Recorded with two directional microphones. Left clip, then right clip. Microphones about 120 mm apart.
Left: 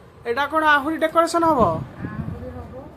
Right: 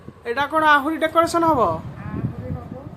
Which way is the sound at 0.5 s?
15° right (ahead or behind).